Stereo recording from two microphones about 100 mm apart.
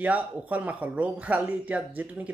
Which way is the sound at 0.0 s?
15° right (ahead or behind).